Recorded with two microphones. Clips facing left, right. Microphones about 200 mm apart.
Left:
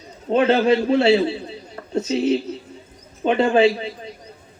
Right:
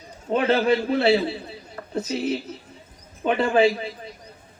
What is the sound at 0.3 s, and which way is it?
Speech, 25° left (ahead or behind).